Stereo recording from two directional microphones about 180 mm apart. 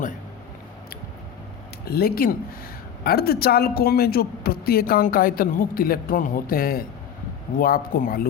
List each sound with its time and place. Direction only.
1.8 s a man's voice: 60° left (ahead or behind)